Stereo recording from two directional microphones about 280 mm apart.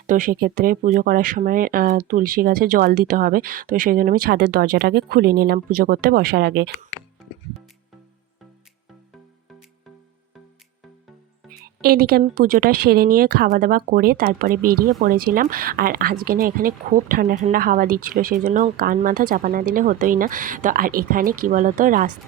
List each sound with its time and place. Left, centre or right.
0.1 s speech: right
11.8 s speech: right